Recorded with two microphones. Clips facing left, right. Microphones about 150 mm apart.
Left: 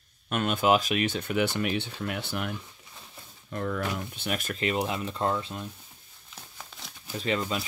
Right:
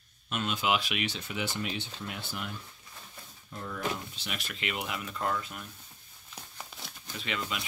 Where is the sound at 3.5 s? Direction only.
70° left (ahead or behind).